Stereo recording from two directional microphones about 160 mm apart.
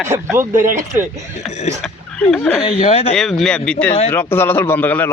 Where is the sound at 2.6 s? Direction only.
35° left (ahead or behind).